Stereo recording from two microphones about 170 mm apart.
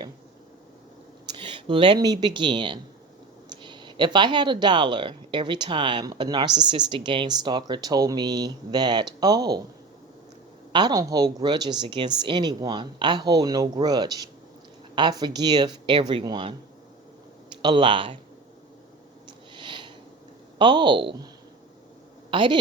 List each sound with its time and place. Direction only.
1.3 s a woman's voice: 30° right (ahead or behind)
10.7 s a woman's voice: 25° right (ahead or behind)
17.6 s a woman's voice: 25° right (ahead or behind)
19.5 s sniff: 30° right (ahead or behind)
20.6 s a woman's voice: 25° right (ahead or behind)
22.3 s a woman's voice: 30° right (ahead or behind)